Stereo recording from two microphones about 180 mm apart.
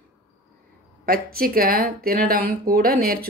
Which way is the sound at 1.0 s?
55° right (ahead or behind).